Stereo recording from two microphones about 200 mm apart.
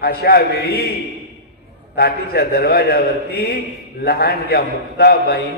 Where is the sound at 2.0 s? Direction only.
50° left (ahead or behind).